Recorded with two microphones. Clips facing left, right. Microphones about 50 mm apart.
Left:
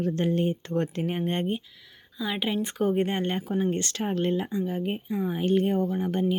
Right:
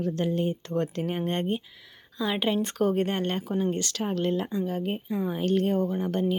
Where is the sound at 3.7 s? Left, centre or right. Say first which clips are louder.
Left 1 dB; left.